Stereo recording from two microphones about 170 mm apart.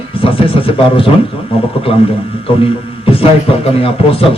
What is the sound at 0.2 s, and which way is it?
Speech, 30° left (ahead or behind).